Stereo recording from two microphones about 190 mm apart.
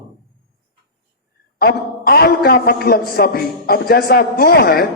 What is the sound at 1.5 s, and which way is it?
A man's voice, 55° left (ahead or behind).